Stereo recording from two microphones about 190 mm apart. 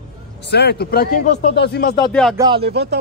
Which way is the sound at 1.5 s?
60° left (ahead or behind).